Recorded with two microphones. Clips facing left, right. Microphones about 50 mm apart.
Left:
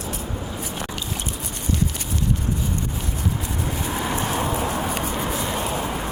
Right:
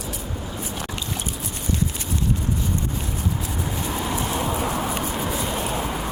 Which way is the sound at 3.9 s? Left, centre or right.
Centre.